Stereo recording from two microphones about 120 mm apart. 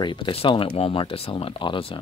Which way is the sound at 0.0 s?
40° left (ahead or behind).